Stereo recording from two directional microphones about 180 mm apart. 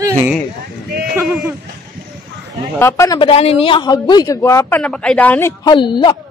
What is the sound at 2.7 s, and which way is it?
Speech, 15° left (ahead or behind).